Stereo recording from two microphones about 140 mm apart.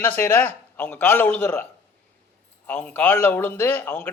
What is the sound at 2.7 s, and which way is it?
A man's voice, 10° left (ahead or behind).